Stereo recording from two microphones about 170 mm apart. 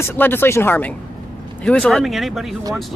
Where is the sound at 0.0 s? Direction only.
15° left (ahead or behind).